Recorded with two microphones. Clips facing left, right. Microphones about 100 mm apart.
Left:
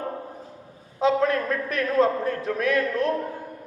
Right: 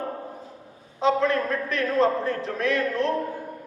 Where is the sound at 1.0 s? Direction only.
30° right (ahead or behind).